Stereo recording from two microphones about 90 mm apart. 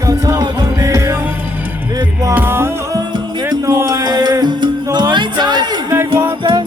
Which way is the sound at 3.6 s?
35° right (ahead or behind).